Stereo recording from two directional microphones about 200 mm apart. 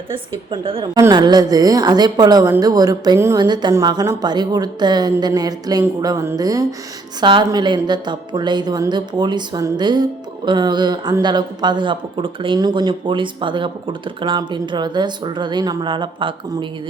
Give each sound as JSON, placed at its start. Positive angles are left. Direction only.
{"t": 0.1, "sound": "a woman's voice", "side_deg": -25}